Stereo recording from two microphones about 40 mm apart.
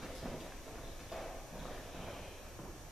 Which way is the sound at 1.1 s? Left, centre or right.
Centre.